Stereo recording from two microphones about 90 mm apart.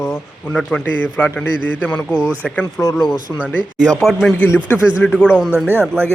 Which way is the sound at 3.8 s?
40° right (ahead or behind).